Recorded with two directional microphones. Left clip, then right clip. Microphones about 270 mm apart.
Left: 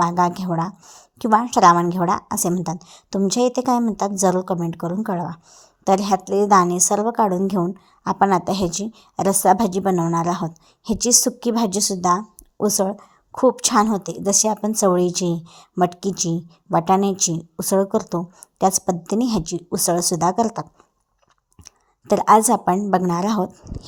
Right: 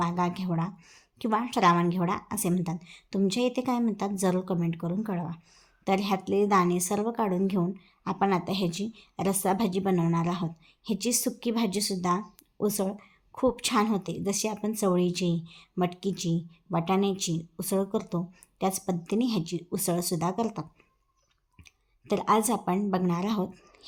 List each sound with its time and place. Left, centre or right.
0.0 s a woman's voice: left